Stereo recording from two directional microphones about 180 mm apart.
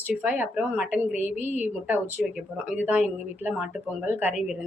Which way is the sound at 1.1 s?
40° left (ahead or behind).